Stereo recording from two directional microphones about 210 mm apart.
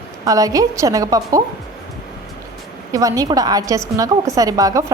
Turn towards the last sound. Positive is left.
turn(degrees=-15)  # may be behind; listen again after turning